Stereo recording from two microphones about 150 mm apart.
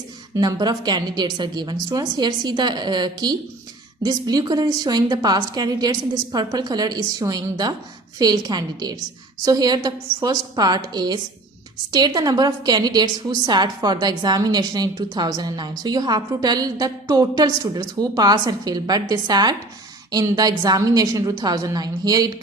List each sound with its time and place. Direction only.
0.3 s a woman's voice: 25° right (ahead or behind)